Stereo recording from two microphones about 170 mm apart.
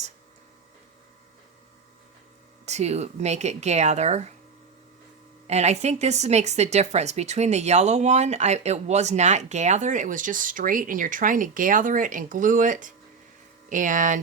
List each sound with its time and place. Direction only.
2.6 s speech: 40° right (ahead or behind)
5.5 s speech: 40° right (ahead or behind)